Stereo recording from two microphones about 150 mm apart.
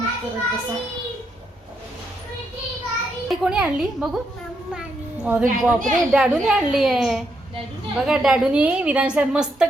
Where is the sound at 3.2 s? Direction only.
5° right (ahead or behind).